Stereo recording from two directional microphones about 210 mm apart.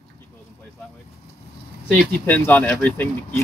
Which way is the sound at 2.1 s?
5° left (ahead or behind).